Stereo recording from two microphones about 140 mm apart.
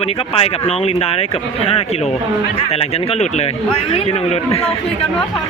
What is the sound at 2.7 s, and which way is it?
Speech, 50° left (ahead or behind).